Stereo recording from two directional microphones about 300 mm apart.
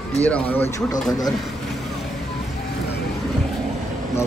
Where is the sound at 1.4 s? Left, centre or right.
Centre.